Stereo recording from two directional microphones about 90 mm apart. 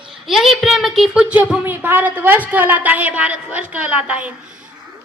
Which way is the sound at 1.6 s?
25° right (ahead or behind).